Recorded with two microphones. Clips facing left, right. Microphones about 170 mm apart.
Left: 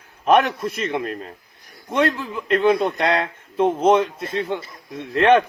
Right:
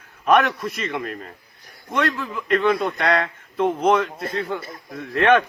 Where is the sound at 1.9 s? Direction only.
30° left (ahead or behind).